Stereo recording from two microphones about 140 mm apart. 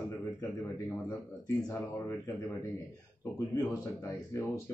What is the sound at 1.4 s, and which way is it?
Speech, 25° left (ahead or behind).